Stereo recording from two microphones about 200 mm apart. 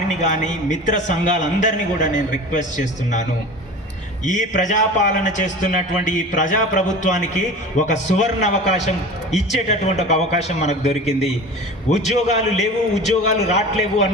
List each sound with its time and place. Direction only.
0.1 s a man's voice: 35° left (ahead or behind)